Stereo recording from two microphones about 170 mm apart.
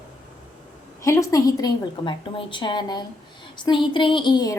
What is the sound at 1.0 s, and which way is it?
A woman's voice, 20° left (ahead or behind).